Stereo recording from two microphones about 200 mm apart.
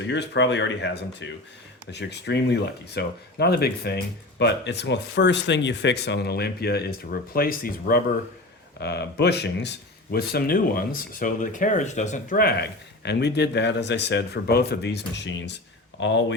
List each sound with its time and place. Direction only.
0.0 s speech: 60° left (ahead or behind)